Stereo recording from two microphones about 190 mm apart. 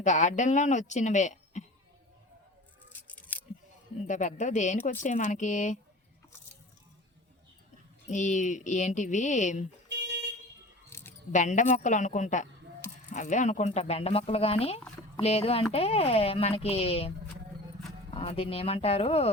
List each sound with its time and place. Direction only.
0.0 s speech: 40° left (ahead or behind)
2.9 s a sound: 10° left (ahead or behind)
4.0 s speech: 40° left (ahead or behind)
8.0 s speech: 40° left (ahead or behind)
9.9 s car alarm: 65° right (ahead or behind)
10.8 s a sound: 10° left (ahead or behind)
11.3 s speech: 40° left (ahead or behind)
18.1 s speech: 30° left (ahead or behind)